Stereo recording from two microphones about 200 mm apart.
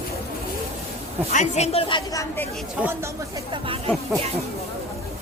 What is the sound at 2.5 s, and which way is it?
Speech, centre (ahead or behind).